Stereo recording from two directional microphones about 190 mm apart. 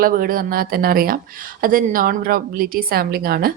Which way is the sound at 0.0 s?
50° right (ahead or behind).